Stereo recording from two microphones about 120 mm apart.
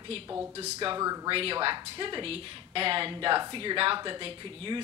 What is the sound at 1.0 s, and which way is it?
Speech, 30° right (ahead or behind).